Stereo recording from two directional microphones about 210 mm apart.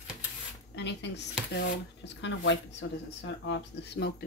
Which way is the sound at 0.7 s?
55° left (ahead or behind).